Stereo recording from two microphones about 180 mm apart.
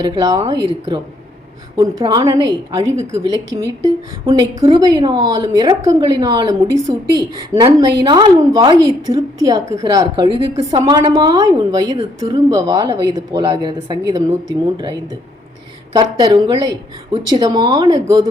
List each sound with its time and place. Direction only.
0.0 s a woman's voice: 20° right (ahead or behind)